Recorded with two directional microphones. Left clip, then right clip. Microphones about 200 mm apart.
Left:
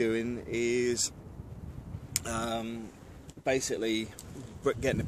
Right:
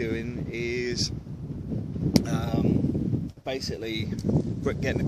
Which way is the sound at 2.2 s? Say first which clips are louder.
Right 5 dB; 5° left (ahead or behind).